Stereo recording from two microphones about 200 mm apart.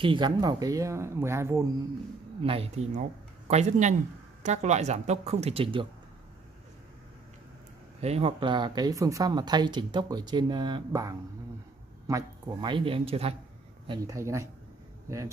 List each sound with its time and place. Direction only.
0.0 s speech: 25° right (ahead or behind)
2.4 s speech: 30° right (ahead or behind)
8.0 s speech: 30° right (ahead or behind)
13.8 s speech: 15° right (ahead or behind)